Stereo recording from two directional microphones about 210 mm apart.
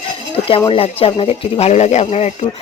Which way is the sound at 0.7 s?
25° left (ahead or behind).